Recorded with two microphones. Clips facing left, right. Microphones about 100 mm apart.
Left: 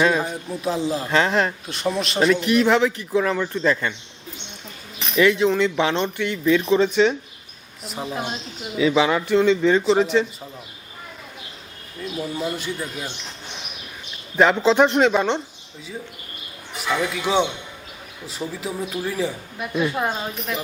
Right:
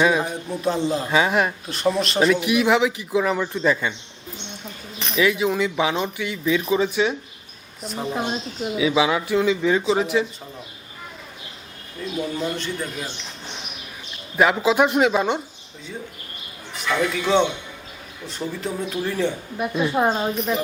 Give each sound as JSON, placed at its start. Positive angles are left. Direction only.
{"t": 0.0, "sound": "speech", "side_deg": -5}
{"t": 1.1, "sound": "speech", "side_deg": -10}
{"t": 1.6, "sound": "speech", "side_deg": 0}
{"t": 4.9, "sound": "speech", "side_deg": 0}
{"t": 8.2, "sound": "speech", "side_deg": -15}
{"t": 12.2, "sound": "speech", "side_deg": 5}
{"t": 14.3, "sound": "speech", "side_deg": -5}
{"t": 16.9, "sound": "speech", "side_deg": 5}
{"t": 19.9, "sound": "speech", "side_deg": -20}